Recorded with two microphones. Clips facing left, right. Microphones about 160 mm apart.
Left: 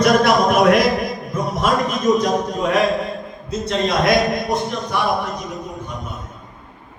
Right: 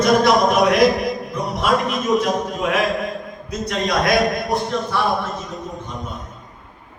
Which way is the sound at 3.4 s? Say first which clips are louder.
Left 3 dB; 25° left (ahead or behind).